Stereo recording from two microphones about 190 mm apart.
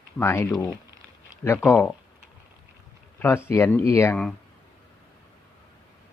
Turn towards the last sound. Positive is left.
turn(degrees=10)  # may be behind; listen again after turning